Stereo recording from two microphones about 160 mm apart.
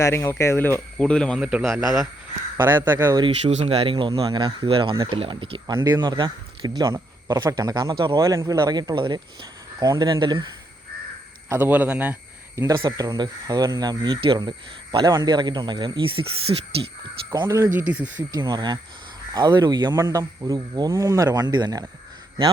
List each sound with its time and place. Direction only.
0.0 s speech: 15° left (ahead or behind)
1.4 s a man's voice: 5° right (ahead or behind)
3.5 s speech: 40° right (ahead or behind)
11.4 s a man's voice: 15° right (ahead or behind); by 16.9 s 35° right (ahead or behind)
17.3 s speech: 25° right (ahead or behind)
17.7 s a man's voice: 10° right (ahead or behind)
18.2 s speech: 25° right (ahead or behind)